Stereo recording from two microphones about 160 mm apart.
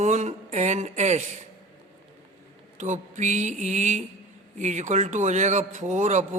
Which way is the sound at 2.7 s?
50° right (ahead or behind).